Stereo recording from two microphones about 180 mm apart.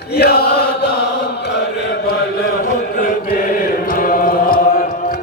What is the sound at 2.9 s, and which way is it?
Chant, 50° left (ahead or behind).